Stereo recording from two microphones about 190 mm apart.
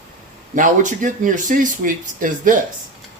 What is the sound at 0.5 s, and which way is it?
Speech, 40° right (ahead or behind).